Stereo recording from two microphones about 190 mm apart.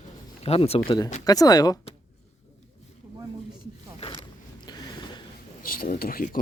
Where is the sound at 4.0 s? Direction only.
30° left (ahead or behind).